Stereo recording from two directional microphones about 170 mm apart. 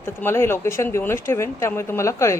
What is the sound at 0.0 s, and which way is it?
Speech, 15° left (ahead or behind).